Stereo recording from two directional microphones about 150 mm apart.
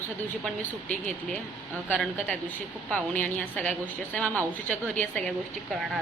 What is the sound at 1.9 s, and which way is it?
A woman's voice, 10° left (ahead or behind).